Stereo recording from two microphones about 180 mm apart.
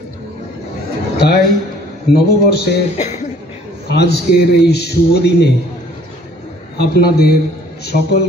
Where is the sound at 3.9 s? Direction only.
65° left (ahead or behind).